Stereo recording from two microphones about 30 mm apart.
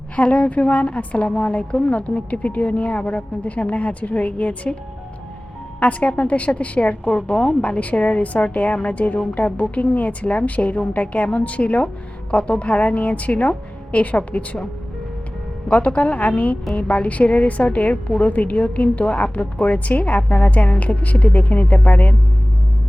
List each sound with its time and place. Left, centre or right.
0.2 s a woman's voice: left
5.8 s a woman's voice: left
7.3 s a woman's voice: left
14.2 s a woman's voice: left
16.0 s a woman's voice: left